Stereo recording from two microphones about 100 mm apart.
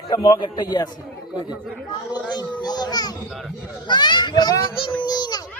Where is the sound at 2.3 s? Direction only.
45° left (ahead or behind).